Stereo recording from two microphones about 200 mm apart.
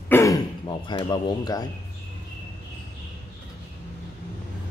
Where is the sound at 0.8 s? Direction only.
20° left (ahead or behind).